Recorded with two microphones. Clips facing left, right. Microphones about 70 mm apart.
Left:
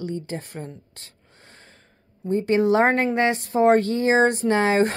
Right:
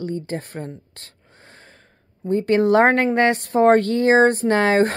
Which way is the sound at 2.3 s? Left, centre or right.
Right.